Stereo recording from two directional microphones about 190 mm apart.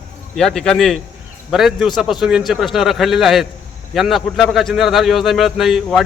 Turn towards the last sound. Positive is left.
turn(degrees=0)  # may be behind; listen again after turning